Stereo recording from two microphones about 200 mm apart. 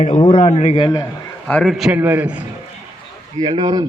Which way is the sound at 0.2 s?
30° left (ahead or behind).